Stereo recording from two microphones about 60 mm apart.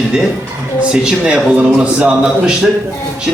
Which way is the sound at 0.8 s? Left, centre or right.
Centre.